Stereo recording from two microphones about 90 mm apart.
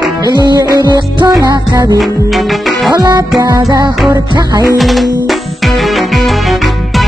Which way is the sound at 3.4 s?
45° right (ahead or behind).